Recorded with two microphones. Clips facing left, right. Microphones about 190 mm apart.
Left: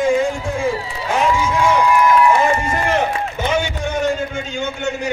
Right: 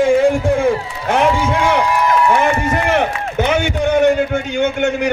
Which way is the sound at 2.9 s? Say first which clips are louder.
Right 3 dB; 65° right (ahead or behind).